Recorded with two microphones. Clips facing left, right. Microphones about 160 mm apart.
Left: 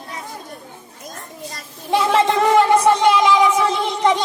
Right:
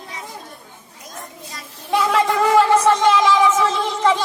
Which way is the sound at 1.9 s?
25° left (ahead or behind).